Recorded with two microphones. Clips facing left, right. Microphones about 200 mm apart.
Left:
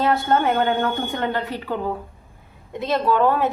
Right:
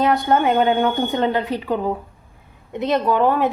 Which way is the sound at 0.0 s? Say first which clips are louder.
Right 2 dB; 15° right (ahead or behind).